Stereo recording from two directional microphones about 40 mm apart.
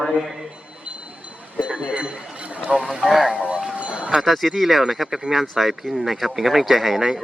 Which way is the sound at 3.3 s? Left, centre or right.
Right.